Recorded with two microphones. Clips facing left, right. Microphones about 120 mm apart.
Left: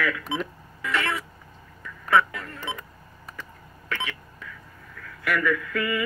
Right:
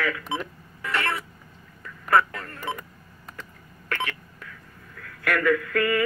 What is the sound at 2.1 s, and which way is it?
Music, 45° right (ahead or behind).